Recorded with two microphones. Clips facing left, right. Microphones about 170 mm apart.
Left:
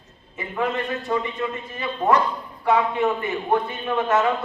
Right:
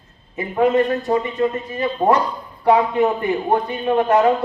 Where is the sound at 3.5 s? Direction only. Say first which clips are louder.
Right 3 dB; 35° right (ahead or behind).